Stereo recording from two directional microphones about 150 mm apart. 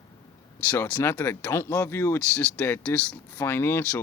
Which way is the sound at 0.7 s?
15° left (ahead or behind).